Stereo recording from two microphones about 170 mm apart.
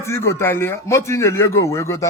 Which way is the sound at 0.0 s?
15° left (ahead or behind).